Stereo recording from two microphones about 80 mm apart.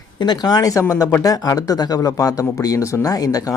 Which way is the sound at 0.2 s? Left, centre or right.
Left.